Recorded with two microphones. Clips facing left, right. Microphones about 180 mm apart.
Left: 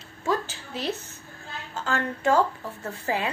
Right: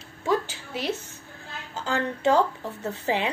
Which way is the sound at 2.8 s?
20° right (ahead or behind).